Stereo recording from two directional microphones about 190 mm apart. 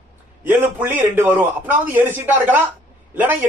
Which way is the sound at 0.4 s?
10° right (ahead or behind).